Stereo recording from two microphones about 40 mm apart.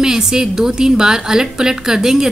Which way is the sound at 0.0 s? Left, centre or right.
Centre.